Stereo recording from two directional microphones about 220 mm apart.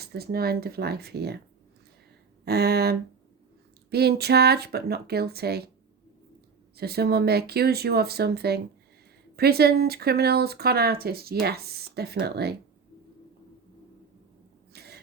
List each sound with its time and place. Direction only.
0.0 s speech: 45° right (ahead or behind)
2.4 s speech: 45° right (ahead or behind)
6.7 s speech: 45° right (ahead or behind)
14.7 s a sound: 45° right (ahead or behind)